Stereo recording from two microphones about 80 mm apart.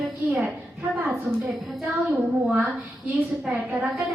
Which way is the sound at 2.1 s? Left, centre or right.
Centre.